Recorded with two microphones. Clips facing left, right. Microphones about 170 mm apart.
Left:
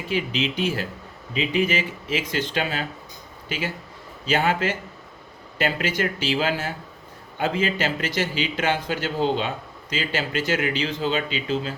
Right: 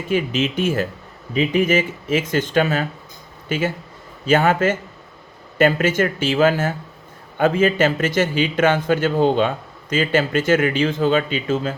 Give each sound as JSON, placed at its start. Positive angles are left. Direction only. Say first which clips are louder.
{"t": 0.1, "sound": "a man's voice", "louder": "right 5 dB", "side_deg": -50}